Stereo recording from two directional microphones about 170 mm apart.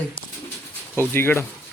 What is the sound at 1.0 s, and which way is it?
Speech, 15° left (ahead or behind).